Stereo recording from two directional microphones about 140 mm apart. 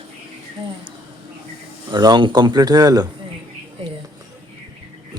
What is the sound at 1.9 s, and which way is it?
A man's voice, 30° right (ahead or behind).